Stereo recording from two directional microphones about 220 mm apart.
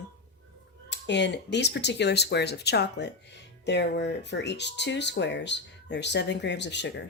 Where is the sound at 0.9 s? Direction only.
50° left (ahead or behind).